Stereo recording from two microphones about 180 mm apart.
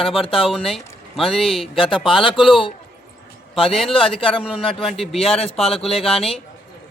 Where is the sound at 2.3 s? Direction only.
Centre (ahead or behind).